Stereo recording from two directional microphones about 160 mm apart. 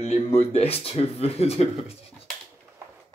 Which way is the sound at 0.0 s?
40° left (ahead or behind).